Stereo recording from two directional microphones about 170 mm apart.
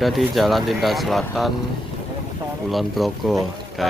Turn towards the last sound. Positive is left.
turn(degrees=0)  # may be behind; listen again after turning